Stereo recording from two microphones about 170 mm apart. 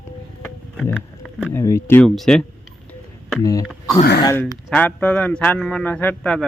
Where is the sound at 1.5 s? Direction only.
15° left (ahead or behind).